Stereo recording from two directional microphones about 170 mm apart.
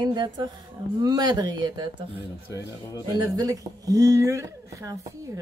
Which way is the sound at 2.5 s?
20° left (ahead or behind).